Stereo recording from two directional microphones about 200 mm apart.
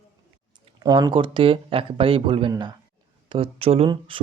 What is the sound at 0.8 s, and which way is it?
Speech, 20° right (ahead or behind).